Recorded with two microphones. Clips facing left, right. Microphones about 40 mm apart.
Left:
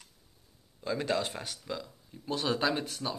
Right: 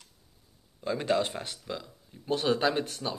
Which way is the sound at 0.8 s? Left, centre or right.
Right.